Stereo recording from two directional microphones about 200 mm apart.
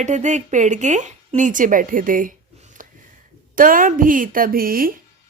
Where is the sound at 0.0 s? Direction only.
35° right (ahead or behind).